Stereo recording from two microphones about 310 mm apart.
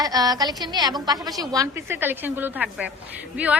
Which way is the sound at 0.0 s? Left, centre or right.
Centre.